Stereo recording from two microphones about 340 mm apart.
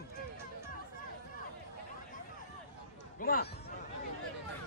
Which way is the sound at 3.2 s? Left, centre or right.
Left.